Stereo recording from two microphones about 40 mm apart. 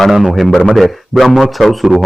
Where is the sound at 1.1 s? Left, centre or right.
Centre.